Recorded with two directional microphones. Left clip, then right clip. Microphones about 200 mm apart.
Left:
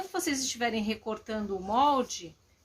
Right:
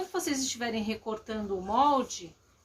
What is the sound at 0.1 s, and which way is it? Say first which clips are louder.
Speech: even; 40° left (ahead or behind).